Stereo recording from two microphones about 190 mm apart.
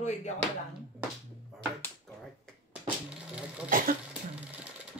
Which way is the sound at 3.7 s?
45° right (ahead or behind).